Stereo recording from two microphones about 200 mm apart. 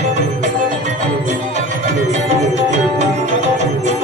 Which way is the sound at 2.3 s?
35° right (ahead or behind).